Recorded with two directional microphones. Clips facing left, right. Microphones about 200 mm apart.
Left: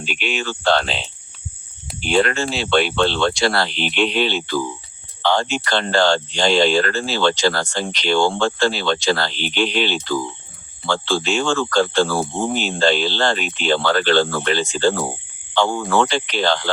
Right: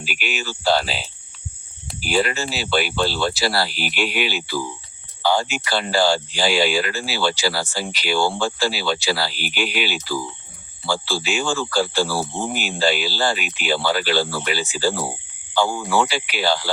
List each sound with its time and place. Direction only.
0.0 s speech: 5° right (ahead or behind)